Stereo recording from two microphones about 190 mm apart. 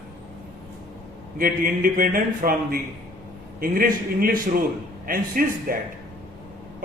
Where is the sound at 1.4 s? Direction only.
45° right (ahead or behind).